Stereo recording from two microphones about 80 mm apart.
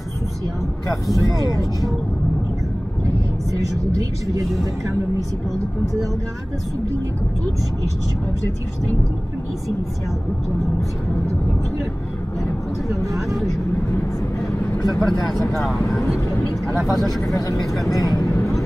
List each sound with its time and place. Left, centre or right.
13.0 s speech: centre
14.8 s speech: left
16.7 s speech: centre
17.8 s speech: left
18.3 s vehicle: left